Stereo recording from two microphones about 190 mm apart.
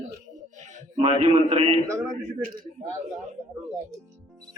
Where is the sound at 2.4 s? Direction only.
45° right (ahead or behind).